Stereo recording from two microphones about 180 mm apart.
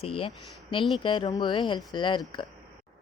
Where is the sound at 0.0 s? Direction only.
30° left (ahead or behind).